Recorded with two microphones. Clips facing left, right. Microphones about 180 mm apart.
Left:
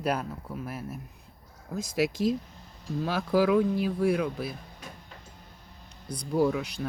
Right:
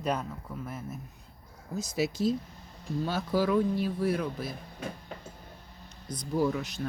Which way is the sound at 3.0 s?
90° left.